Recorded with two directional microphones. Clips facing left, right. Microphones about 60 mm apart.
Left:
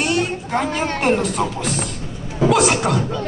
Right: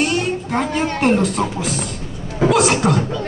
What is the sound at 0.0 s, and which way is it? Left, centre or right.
A man's voice, centre.